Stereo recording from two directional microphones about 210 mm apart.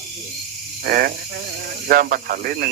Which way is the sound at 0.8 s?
45° right (ahead or behind).